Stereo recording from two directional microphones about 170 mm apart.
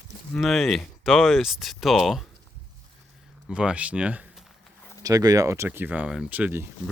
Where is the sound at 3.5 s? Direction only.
5° right (ahead or behind).